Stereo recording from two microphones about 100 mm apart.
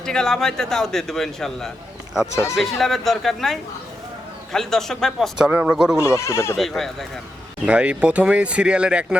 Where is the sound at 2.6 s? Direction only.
Centre (ahead or behind).